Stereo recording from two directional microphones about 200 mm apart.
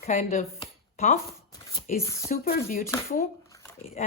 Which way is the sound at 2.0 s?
15° left (ahead or behind).